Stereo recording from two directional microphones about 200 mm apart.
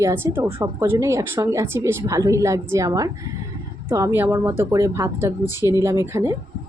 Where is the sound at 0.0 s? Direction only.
15° right (ahead or behind).